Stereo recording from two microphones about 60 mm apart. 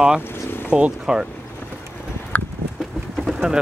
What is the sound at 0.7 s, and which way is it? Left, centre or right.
Speech, centre.